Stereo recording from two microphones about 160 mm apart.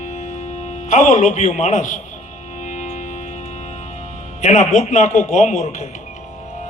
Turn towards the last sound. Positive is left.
turn(degrees=45)  # may be behind; listen again after turning